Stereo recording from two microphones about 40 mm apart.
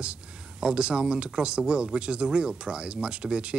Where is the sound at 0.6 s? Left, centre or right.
Right.